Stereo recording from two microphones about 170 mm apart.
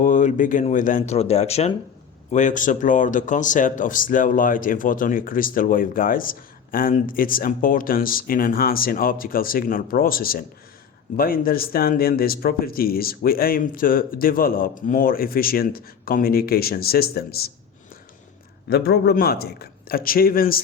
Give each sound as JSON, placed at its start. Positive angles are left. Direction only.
{"t": 0.0, "sound": "speech", "side_deg": 50}
{"t": 18.7, "sound": "speech", "side_deg": 70}